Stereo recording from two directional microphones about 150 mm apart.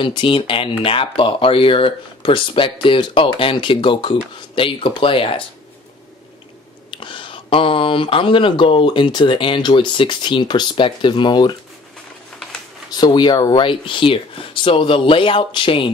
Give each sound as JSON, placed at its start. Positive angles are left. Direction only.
{"t": 0.0, "sound": "speech", "side_deg": 35}
{"t": 6.9, "sound": "speech", "side_deg": 35}
{"t": 12.9, "sound": "speech", "side_deg": 30}